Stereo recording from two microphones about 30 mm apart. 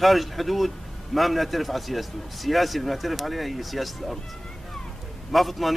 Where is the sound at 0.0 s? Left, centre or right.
Centre.